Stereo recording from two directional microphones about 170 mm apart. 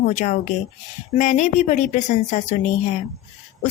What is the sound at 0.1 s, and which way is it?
A woman's voice, 45° left (ahead or behind).